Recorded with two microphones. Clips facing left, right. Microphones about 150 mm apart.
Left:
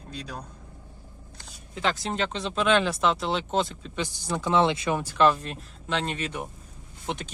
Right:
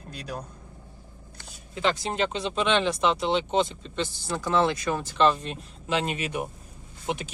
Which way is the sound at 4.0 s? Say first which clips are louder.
Even; 15° left (ahead or behind).